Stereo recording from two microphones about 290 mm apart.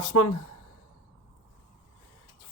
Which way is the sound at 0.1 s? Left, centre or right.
Left.